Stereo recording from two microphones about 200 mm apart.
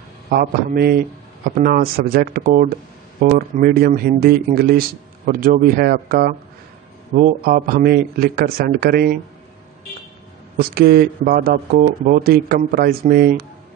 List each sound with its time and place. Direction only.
0.3 s speech: 45° right (ahead or behind)
10.6 s speech: 50° right (ahead or behind)